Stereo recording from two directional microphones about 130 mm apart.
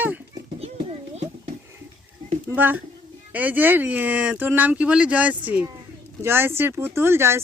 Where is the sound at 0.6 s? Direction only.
55° right (ahead or behind).